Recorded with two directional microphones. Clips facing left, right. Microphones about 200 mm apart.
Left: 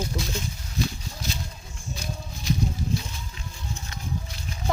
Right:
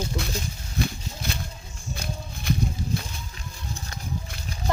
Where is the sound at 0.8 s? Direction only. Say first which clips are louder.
Right 1 dB; 60° right (ahead or behind).